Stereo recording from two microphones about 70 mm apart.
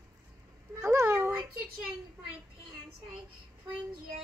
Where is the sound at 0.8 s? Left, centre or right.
Right.